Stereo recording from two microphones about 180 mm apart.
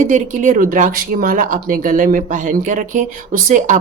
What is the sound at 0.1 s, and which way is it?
Speech, 45° right (ahead or behind).